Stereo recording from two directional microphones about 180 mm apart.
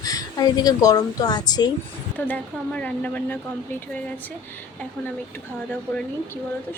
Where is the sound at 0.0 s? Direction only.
20° left (ahead or behind).